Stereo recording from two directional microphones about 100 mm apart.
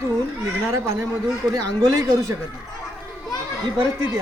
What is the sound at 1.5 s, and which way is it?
Speech, 40° right (ahead or behind).